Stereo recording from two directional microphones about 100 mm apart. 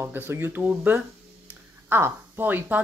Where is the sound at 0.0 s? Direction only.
25° right (ahead or behind).